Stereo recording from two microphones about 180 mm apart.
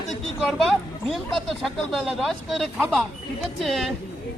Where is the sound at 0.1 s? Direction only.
Centre (ahead or behind).